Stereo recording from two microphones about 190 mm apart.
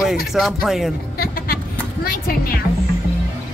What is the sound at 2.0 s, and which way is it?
Speech, 50° left (ahead or behind).